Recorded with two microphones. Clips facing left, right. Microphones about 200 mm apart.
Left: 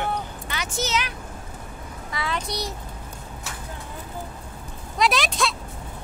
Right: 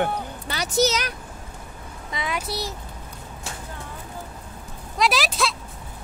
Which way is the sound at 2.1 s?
20° right (ahead or behind).